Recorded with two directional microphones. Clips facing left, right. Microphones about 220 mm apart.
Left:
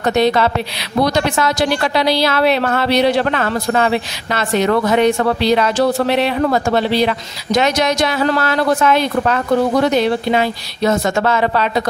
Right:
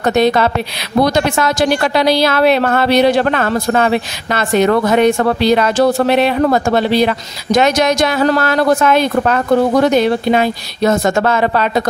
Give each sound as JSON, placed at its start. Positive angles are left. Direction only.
{"t": 0.0, "sound": "a woman's voice", "side_deg": -50}